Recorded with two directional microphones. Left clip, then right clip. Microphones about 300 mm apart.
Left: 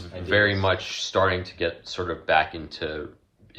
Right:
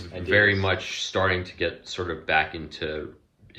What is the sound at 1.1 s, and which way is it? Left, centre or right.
Speech, centre.